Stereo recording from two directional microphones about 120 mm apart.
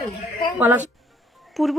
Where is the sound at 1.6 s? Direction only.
Centre (ahead or behind).